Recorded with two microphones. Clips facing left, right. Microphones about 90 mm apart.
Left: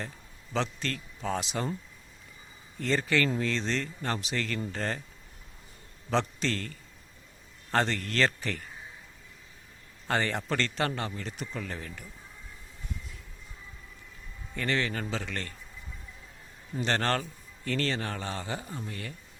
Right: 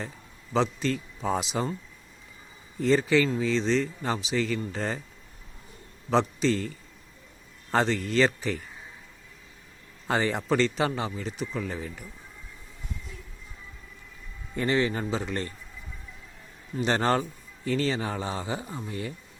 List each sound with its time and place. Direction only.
0.5 s speech: 5° right (ahead or behind)
2.8 s speech: 5° right (ahead or behind)
6.1 s speech: 5° right (ahead or behind)
10.1 s speech: 5° right (ahead or behind)
14.5 s speech: 20° right (ahead or behind)
16.8 s speech: 15° right (ahead or behind)